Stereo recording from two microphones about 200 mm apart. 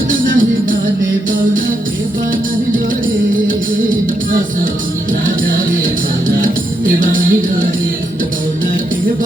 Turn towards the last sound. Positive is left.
turn(degrees=-45)  # may be behind; listen again after turning